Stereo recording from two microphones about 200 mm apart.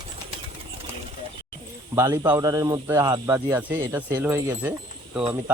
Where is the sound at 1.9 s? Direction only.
15° right (ahead or behind).